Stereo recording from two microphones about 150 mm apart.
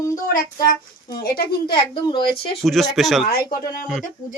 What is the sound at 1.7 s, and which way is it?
Speech, 30° left (ahead or behind).